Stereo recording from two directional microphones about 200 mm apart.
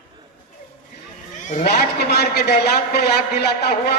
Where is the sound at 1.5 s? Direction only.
50° left (ahead or behind).